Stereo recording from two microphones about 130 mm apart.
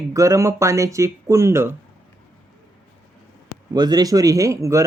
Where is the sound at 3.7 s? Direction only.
30° right (ahead or behind).